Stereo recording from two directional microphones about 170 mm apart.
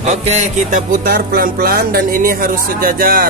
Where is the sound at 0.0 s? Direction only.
40° right (ahead or behind).